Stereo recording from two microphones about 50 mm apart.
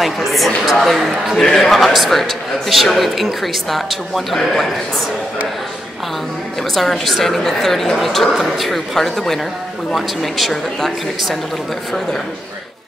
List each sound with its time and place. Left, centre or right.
0.0 s a man's voice: centre
6.7 s a man's voice: centre